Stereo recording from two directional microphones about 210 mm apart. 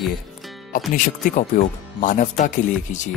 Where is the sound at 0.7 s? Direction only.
40° left (ahead or behind).